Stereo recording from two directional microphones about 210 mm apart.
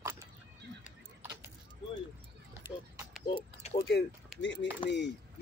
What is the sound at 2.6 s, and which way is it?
Clip-clop, 10° right (ahead or behind).